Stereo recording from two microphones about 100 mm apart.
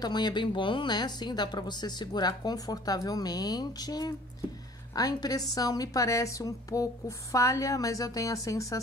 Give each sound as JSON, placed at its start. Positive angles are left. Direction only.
{"t": 0.0, "sound": "a woman's voice", "side_deg": 45}